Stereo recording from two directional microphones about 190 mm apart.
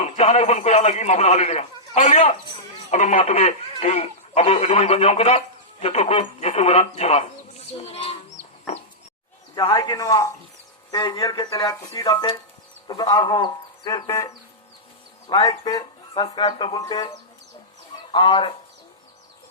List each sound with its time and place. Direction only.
0.0 s a man's voice: 35° left (ahead or behind)
8.7 s chicken: 35° left (ahead or behind)
9.6 s speech: 20° left (ahead or behind)